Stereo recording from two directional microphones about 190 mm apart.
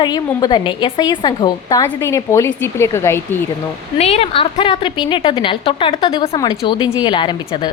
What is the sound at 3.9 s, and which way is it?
A woman's voice, 35° left (ahead or behind).